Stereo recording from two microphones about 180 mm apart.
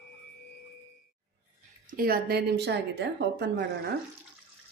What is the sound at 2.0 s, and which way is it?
A woman's voice, 55° right (ahead or behind).